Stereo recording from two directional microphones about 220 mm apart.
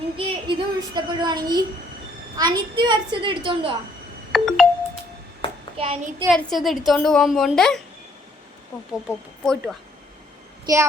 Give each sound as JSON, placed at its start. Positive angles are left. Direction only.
{"t": 0.2, "sound": "speech", "side_deg": -20}
{"t": 4.3, "sound": "ringtone", "side_deg": 0}
{"t": 5.7, "sound": "speech", "side_deg": -25}
{"t": 6.3, "sound": "a woman's voice", "side_deg": 0}
{"t": 8.9, "sound": "a woman's voice", "side_deg": 0}
{"t": 10.7, "sound": "child singing", "side_deg": -15}